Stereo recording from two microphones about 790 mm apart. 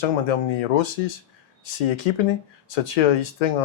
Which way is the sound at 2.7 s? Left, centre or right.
Left.